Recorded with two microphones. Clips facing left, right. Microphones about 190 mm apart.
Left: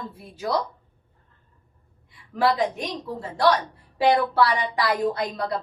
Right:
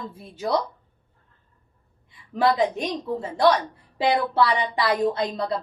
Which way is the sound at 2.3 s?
20° right (ahead or behind).